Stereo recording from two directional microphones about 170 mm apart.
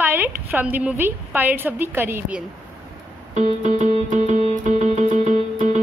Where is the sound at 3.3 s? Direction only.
45° right (ahead or behind).